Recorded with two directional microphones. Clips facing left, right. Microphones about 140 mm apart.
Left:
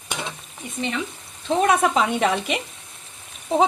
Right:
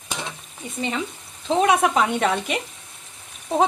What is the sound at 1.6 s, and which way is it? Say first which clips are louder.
Speech: even; 5° right (ahead or behind).